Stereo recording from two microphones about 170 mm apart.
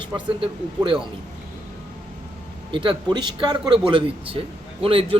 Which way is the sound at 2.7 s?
30° right (ahead or behind).